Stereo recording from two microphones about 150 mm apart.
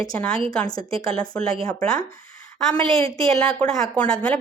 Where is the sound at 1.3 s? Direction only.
10° left (ahead or behind).